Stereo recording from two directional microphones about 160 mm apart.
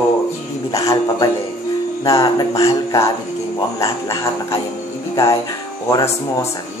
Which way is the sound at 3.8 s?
20° left (ahead or behind).